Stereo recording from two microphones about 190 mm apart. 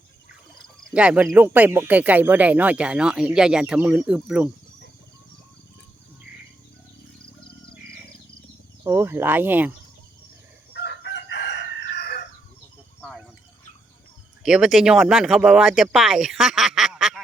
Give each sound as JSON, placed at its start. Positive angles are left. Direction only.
{"t": 0.9, "sound": "speech", "side_deg": -5}
{"t": 8.8, "sound": "speech", "side_deg": -15}
{"t": 10.8, "sound": "chicken", "side_deg": 65}
{"t": 13.0, "sound": "liquid", "side_deg": 0}
{"t": 14.4, "sound": "speech", "side_deg": 0}